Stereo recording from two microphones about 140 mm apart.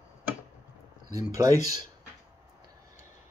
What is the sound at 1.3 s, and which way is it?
Speech, 25° right (ahead or behind).